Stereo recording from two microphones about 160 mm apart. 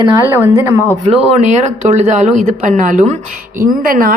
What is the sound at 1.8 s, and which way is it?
A woman's voice, 50° right (ahead or behind).